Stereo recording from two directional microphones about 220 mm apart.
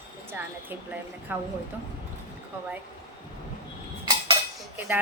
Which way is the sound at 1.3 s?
10° right (ahead or behind).